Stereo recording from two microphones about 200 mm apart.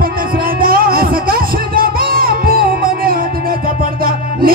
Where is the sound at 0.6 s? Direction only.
45° right (ahead or behind).